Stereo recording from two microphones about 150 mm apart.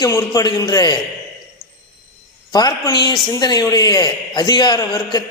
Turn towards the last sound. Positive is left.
turn(degrees=30)  # may be behind; listen again after turning